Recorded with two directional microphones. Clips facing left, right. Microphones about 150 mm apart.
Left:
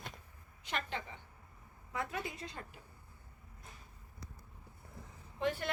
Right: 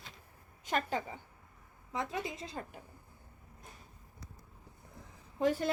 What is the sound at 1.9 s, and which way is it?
Speech, 25° right (ahead or behind).